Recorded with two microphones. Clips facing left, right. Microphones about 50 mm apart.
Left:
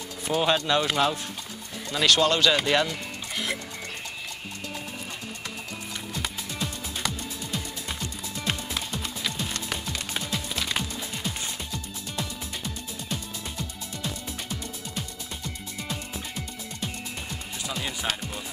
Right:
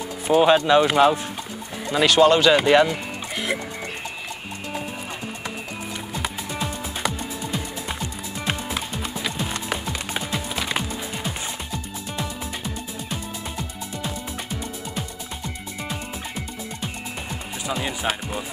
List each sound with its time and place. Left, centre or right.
0.3 s speech: right
6.1 s music: centre
17.6 s music: centre